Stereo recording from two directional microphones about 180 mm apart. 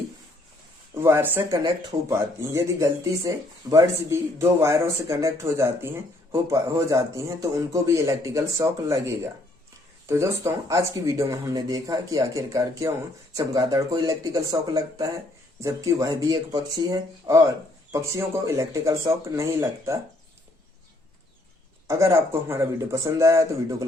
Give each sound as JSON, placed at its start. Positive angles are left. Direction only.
{"t": 0.9, "sound": "speech", "side_deg": -15}
{"t": 21.8, "sound": "speech", "side_deg": -15}